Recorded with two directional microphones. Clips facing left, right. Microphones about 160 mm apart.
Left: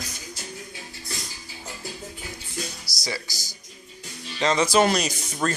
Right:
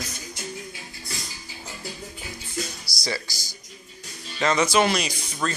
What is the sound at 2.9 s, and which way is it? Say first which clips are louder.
Music: right 1 dB; 45° left (ahead or behind).